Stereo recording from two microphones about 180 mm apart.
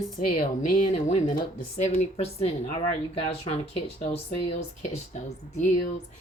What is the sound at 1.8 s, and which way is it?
Speech, 40° left (ahead or behind).